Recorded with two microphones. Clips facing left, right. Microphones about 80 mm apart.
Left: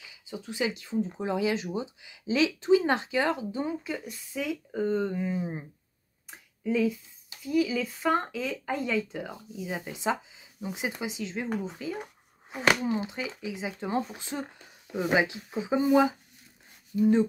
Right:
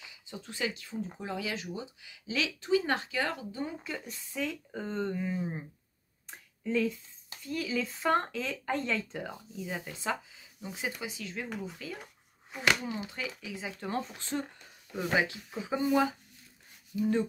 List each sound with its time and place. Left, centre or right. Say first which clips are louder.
0.3 s speech: left 5 dB; centre
3.8 s speech: left 4 dB; centre
6.3 s a sound: left 3 dB; centre
7.4 s speech: left 7 dB; centre; by 17.3 s left